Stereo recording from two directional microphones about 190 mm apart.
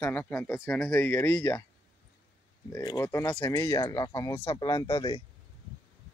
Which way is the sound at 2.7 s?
15° left (ahead or behind).